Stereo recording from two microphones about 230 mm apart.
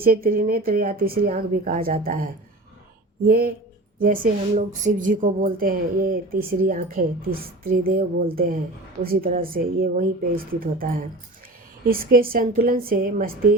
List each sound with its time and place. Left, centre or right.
0.0 s a woman's voice: right